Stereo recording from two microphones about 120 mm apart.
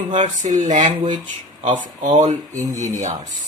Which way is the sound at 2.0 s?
90° right.